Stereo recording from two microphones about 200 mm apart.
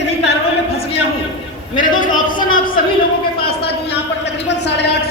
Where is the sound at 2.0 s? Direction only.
40° left (ahead or behind).